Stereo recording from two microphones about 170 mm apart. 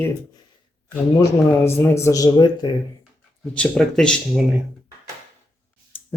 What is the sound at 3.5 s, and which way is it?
Speech, 5° left (ahead or behind).